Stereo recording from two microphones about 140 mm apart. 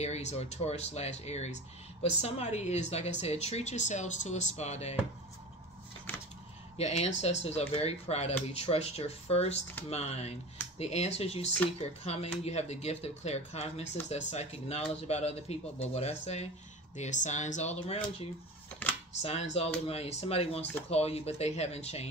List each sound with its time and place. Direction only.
0.0 s speech: 50° left (ahead or behind)
6.8 s speech: 50° left (ahead or behind)
16.9 s speech: 60° left (ahead or behind)